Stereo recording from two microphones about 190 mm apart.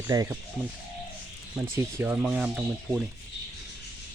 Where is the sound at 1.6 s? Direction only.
10° right (ahead or behind).